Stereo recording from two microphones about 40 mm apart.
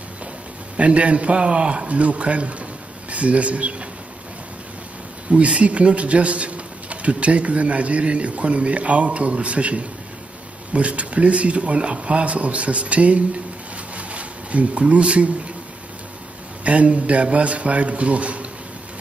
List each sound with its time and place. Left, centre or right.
0.7 s a man's voice: right
5.6 s a man's voice: right
16.6 s a man's voice: right